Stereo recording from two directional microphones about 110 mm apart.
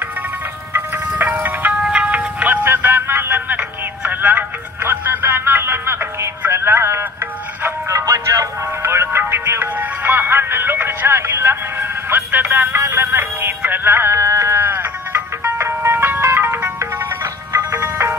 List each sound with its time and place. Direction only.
0.7 s music: 15° right (ahead or behind)